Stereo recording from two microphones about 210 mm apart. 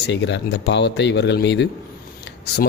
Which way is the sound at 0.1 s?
55° left (ahead or behind).